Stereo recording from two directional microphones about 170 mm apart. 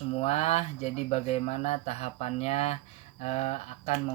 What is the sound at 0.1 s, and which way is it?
Speech, 40° left (ahead or behind).